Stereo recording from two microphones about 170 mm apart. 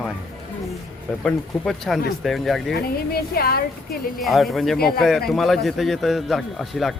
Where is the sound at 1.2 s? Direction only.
5° left (ahead or behind).